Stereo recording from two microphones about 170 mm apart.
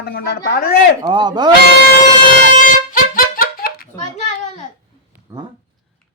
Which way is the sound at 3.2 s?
60° left (ahead or behind).